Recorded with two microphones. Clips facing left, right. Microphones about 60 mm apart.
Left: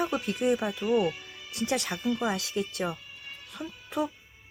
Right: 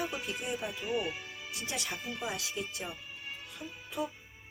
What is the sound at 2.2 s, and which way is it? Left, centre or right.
Speech, left.